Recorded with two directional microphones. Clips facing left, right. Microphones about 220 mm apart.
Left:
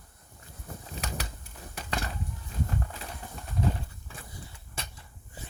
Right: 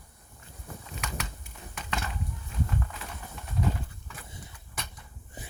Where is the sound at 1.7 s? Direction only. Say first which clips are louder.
Left 1 dB; 35° left (ahead or behind).